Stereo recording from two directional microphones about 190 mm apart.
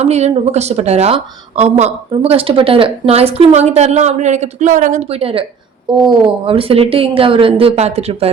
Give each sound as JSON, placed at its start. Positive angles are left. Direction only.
{"t": 0.0, "sound": "a woman's voice", "side_deg": -35}